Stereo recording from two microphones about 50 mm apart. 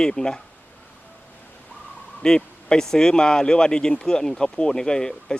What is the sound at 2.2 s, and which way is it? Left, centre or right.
Speech, centre.